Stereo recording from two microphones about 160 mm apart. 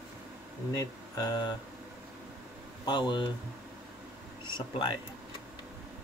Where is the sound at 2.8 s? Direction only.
25° left (ahead or behind).